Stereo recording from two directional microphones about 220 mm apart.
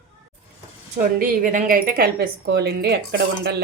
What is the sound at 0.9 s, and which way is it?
Speech, 35° right (ahead or behind).